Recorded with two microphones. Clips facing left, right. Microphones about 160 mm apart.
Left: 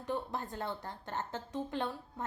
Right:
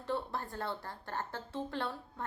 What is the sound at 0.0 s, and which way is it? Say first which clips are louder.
A woman's voice: even; 15° left (ahead or behind).